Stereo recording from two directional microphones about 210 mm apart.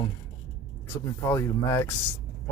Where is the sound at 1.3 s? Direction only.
15° left (ahead or behind).